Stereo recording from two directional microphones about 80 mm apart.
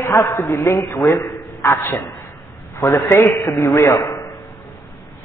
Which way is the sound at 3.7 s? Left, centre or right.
Left.